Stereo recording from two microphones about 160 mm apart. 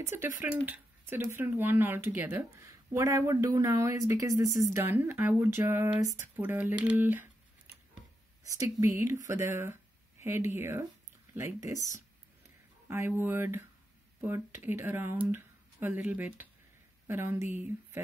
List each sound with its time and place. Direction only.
0.0 s speech: 15° right (ahead or behind)
8.5 s speech: 20° right (ahead or behind)
12.8 s speech: 15° right (ahead or behind)